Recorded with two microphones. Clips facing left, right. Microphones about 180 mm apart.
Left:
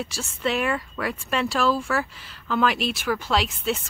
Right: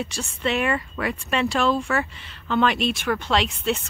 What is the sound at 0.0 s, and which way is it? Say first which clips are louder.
Speech: right 1 dB; centre (ahead or behind).